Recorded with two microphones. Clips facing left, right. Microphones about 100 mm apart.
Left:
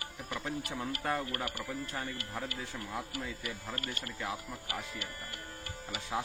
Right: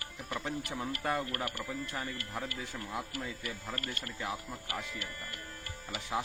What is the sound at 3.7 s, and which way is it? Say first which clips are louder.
Speech: even; 20° left (ahead or behind).